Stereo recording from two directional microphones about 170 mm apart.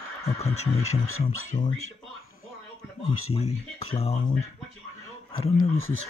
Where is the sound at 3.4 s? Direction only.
40° left (ahead or behind).